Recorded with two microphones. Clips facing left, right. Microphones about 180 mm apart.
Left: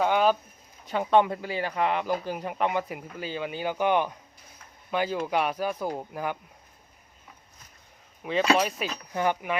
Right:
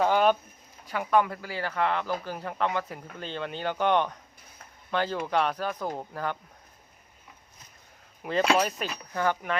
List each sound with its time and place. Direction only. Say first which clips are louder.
0.0 s speech: even; centre (ahead or behind)
0.9 s speech: left 3 dB; 25° left (ahead or behind)
8.2 s speech: left 1 dB; centre (ahead or behind)
9.1 s speech: left 1 dB; 15° left (ahead or behind)